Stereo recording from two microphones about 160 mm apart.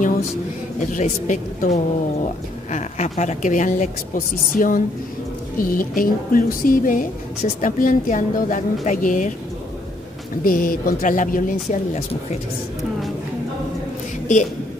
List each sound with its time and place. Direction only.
0.7 s speech: 50° left (ahead or behind)
10.4 s speech: 60° left (ahead or behind)
14.2 s a woman's voice: 50° left (ahead or behind)